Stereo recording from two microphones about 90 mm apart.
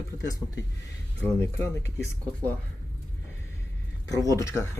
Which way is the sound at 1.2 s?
25° left (ahead or behind).